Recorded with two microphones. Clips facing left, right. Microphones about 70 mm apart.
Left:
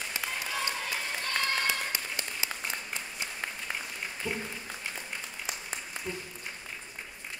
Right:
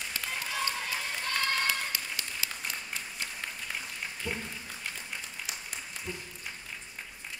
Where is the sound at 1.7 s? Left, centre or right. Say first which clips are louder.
Even; left.